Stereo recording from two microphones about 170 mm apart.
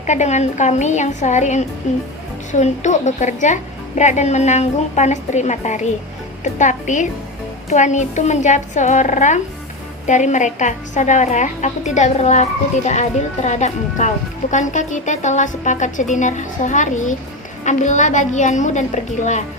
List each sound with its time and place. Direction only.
0.0 s a woman's voice: 45° left (ahead or behind)